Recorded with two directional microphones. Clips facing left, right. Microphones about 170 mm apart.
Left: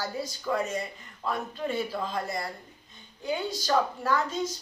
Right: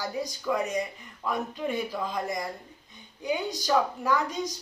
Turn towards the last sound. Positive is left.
turn(degrees=-15)  # may be behind; listen again after turning